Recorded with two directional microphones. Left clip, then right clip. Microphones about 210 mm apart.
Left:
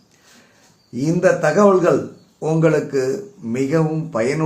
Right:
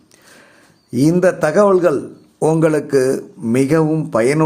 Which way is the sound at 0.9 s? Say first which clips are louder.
Right 3 dB; 35° right (ahead or behind).